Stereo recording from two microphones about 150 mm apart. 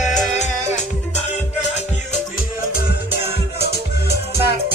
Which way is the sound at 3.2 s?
15° right (ahead or behind).